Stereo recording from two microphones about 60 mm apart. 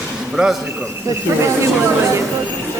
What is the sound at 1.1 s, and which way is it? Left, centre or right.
Speech, right.